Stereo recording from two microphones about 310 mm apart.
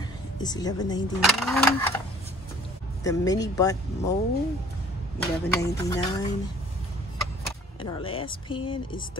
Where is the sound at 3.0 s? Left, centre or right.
Centre.